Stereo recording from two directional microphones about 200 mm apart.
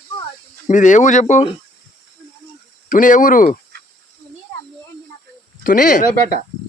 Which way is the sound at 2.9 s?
40° left (ahead or behind).